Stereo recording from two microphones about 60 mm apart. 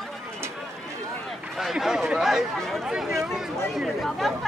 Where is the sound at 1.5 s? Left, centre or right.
Centre.